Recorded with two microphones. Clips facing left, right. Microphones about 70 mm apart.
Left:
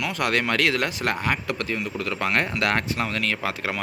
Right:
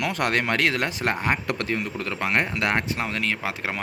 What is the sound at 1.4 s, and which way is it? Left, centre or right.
Speech, right.